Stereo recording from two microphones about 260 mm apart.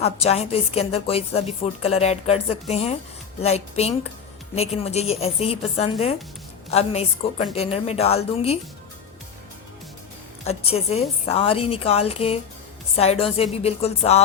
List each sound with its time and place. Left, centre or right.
0.0 s a woman's voice: left
10.4 s a woman's voice: left